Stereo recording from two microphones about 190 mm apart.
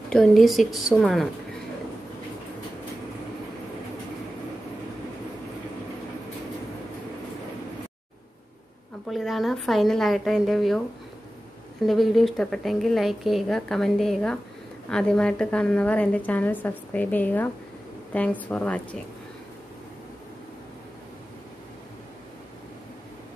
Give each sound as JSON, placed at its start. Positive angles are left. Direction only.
{"t": 0.1, "sound": "a woman's voice", "side_deg": 0}
{"t": 9.0, "sound": "a woman's voice", "side_deg": 0}
{"t": 11.8, "sound": "a woman's voice", "side_deg": 0}